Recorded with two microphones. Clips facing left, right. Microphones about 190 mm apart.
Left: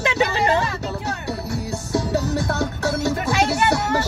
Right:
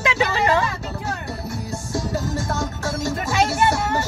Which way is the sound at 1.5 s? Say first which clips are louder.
Left 4 dB; 70° left (ahead or behind).